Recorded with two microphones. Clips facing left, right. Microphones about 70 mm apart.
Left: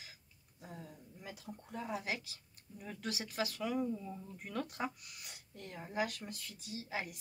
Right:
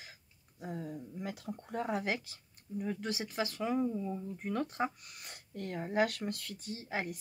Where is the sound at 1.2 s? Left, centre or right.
Right.